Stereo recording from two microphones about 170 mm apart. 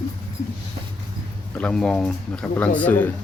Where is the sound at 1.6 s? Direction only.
5° left (ahead or behind).